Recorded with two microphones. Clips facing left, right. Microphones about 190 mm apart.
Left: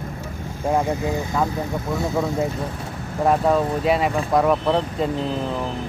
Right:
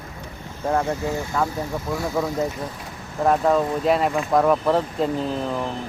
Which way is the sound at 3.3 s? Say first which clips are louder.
Even; 5° left (ahead or behind).